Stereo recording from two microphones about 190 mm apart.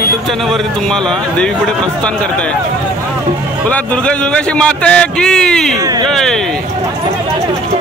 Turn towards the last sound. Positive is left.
turn(degrees=5)  # may be behind; listen again after turning